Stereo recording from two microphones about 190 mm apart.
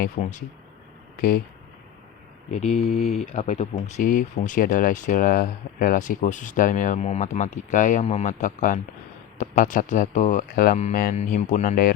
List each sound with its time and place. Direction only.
0.0 s speech: 40° left (ahead or behind)
2.5 s speech: 35° left (ahead or behind)